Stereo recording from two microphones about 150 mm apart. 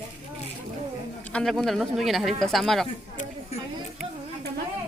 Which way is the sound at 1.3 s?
5° left (ahead or behind).